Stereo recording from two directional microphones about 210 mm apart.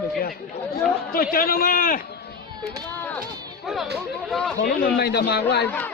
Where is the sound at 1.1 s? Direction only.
45° left (ahead or behind).